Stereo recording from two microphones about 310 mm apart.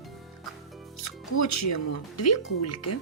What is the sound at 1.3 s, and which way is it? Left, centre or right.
Speech, left.